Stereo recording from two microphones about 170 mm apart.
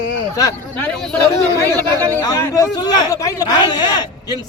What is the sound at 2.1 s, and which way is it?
A man's voice, 20° left (ahead or behind).